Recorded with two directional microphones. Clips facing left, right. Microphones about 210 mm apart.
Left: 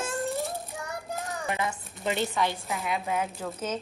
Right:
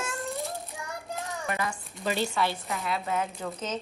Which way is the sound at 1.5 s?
20° left (ahead or behind).